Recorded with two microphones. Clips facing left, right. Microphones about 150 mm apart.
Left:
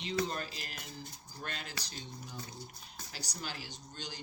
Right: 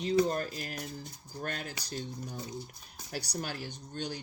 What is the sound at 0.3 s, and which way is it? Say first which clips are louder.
Speech: right 7 dB; 45° right (ahead or behind).